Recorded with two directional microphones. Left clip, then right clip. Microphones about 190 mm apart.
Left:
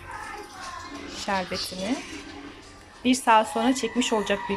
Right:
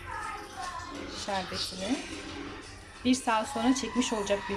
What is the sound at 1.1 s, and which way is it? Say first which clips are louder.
Music: left 6 dB; 5° left (ahead or behind).